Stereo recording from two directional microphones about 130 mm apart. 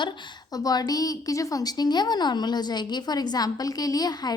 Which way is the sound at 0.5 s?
30° left (ahead or behind).